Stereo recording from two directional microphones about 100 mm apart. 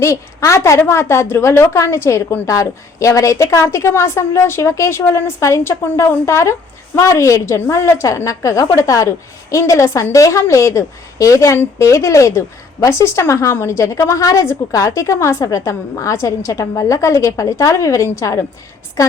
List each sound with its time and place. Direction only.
0.0 s a woman's voice: 30° left (ahead or behind)